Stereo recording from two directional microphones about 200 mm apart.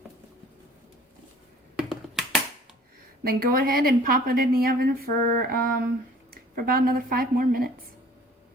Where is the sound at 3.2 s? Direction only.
50° right (ahead or behind).